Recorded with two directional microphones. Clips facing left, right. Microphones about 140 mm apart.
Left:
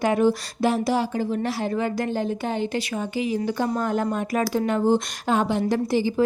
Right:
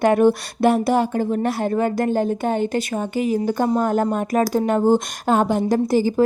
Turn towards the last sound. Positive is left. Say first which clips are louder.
# right 4 dB
turn(degrees=-45)  # may be behind; listen again after turning